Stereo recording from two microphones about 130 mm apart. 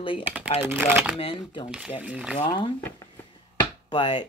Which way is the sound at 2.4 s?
35° left (ahead or behind).